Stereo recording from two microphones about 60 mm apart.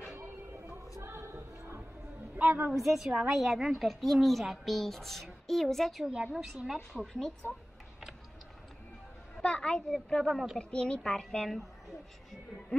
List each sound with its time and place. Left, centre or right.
1.0 s music: right
2.3 s a woman's voice: right
2.7 s a woman's voice: centre
9.4 s a woman's voice: centre
10.3 s a woman's voice: centre
10.6 s a woman's voice: centre